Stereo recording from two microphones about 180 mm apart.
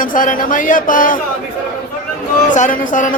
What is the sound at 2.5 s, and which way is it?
Speech, 45° left (ahead or behind).